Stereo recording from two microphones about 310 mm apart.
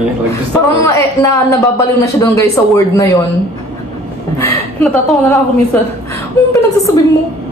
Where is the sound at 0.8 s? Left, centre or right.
Centre.